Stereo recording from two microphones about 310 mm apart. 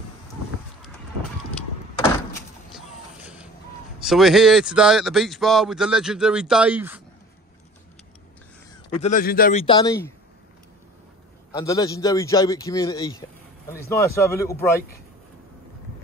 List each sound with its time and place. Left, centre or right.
2.7 s music: centre
4.0 s a man's voice: centre
8.9 s a man's voice: left
11.5 s a man's voice: centre